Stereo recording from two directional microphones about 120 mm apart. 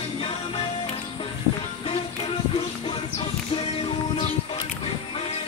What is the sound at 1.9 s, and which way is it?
Music, 45° left (ahead or behind).